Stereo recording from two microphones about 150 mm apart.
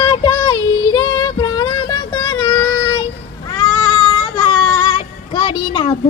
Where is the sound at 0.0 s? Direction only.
25° left (ahead or behind).